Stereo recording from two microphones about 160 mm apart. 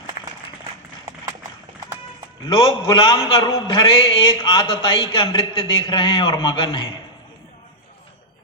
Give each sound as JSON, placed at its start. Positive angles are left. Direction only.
{"t": 2.5, "sound": "a man's voice", "side_deg": 30}